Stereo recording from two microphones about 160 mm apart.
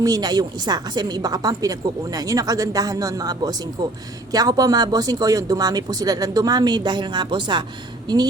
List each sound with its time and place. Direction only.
0.0 s a woman's voice: 25° right (ahead or behind)